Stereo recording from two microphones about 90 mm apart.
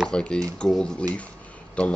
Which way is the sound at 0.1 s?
10° left (ahead or behind).